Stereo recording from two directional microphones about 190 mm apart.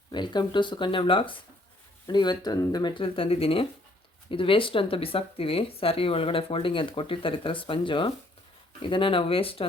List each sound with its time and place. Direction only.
0.1 s speech: 25° left (ahead or behind)